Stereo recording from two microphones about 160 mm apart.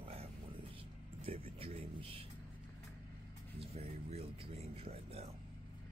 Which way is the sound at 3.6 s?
40° right (ahead or behind).